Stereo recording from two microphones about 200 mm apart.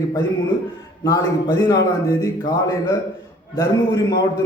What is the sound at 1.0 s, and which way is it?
A man's voice, 15° left (ahead or behind).